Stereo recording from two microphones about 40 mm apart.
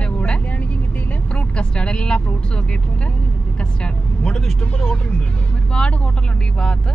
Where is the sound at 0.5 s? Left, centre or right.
Left.